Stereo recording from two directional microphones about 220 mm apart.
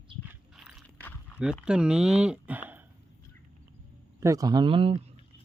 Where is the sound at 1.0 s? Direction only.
10° left (ahead or behind).